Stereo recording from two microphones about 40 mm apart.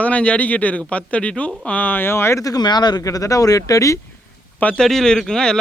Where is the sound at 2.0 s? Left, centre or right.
Left.